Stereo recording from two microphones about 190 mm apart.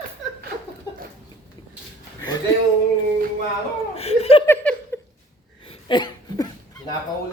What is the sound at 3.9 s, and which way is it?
Speech, 35° left (ahead or behind).